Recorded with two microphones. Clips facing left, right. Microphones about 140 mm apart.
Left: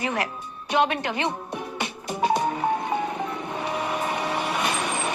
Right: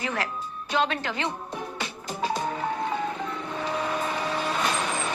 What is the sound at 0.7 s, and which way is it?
Speech, 15° left (ahead or behind).